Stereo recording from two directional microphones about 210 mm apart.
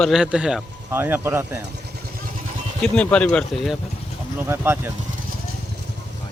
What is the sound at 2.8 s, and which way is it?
Speech, 5° left (ahead or behind).